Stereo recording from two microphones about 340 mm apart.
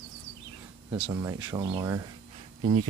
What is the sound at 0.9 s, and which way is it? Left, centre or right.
Speech, centre.